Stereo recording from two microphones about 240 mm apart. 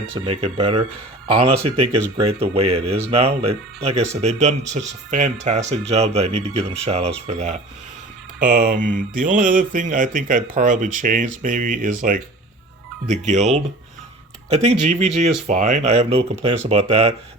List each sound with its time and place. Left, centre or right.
0.1 s speech: right
8.4 s mantra: right
13.1 s speech: right